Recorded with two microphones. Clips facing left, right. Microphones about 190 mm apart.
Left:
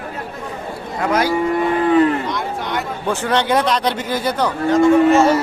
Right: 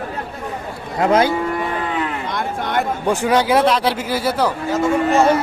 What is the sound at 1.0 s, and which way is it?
Speech, 25° right (ahead or behind).